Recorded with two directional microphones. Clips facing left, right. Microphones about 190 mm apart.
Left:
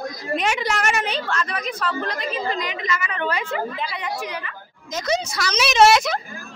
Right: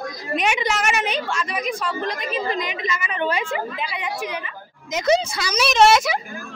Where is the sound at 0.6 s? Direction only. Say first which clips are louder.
Right 1 dB; centre (ahead or behind).